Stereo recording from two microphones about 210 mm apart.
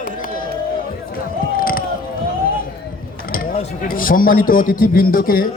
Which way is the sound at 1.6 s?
45° left (ahead or behind).